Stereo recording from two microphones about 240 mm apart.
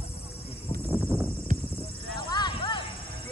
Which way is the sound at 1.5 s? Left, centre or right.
Right.